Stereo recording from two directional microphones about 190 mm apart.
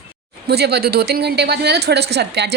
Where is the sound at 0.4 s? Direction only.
60° right (ahead or behind).